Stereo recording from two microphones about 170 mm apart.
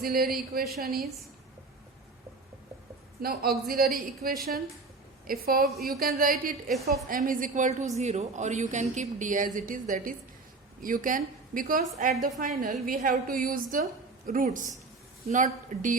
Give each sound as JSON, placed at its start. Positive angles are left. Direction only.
{"t": 0.0, "sound": "a woman's voice", "side_deg": -60}
{"t": 3.2, "sound": "a woman's voice", "side_deg": -60}